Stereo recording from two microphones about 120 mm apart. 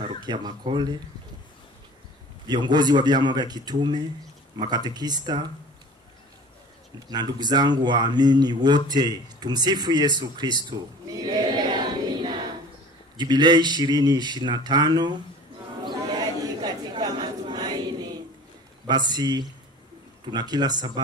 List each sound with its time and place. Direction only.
0.2 s speech: 35° right (ahead or behind)
2.4 s speech: 35° right (ahead or behind)
7.1 s speech: 35° right (ahead or behind)
15.8 s a sound: 35° right (ahead or behind)
18.9 s speech: 35° right (ahead or behind)